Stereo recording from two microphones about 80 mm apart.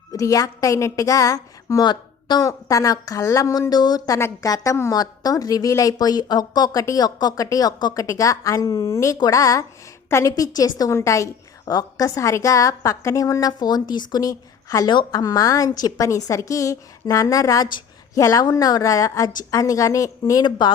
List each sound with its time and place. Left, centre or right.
0.1 s a woman's voice: left
1.8 s speech: left
2.5 s a woman's voice: left
3.7 s a woman's voice: left
9.1 s a woman's voice: left
10.3 s a woman's voice: left
11.6 s a woman's voice: left
14.8 s a woman's voice: left
20.4 s a woman's voice: left